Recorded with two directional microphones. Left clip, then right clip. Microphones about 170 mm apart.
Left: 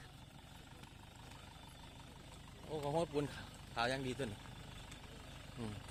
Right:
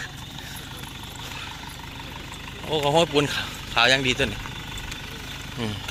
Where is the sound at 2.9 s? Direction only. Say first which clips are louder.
Right 18 dB; 5° left (ahead or behind).